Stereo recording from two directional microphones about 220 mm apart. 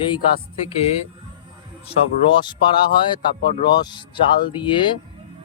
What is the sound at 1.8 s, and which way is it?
Speech, 20° left (ahead or behind).